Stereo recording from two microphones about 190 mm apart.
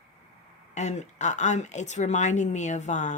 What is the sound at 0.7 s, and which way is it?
Speech, 35° left (ahead or behind).